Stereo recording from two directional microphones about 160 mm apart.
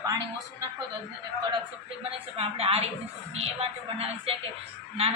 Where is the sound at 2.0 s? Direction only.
35° right (ahead or behind).